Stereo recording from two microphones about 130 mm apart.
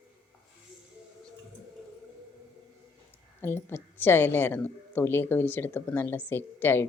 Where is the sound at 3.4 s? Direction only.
20° left (ahead or behind).